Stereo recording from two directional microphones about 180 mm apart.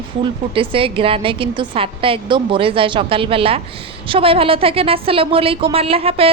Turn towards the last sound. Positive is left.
turn(degrees=-30)  # may be behind; listen again after turning